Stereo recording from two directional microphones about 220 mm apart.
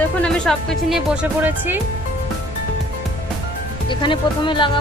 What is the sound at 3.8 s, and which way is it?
Speech, 20° left (ahead or behind).